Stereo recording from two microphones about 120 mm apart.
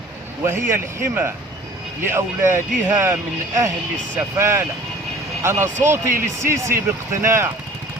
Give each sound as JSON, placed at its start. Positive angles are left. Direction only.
{"t": 0.4, "sound": "speech", "side_deg": -20}